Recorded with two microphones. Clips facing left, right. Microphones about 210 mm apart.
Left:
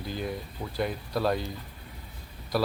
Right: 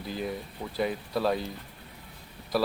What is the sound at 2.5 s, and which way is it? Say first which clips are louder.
Speech: even; centre (ahead or behind).